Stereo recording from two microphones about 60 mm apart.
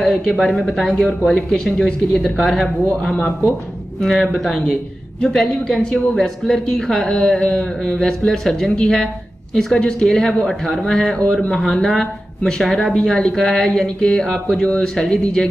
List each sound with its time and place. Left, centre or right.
0.0 s speech: centre
11.5 s speech: centre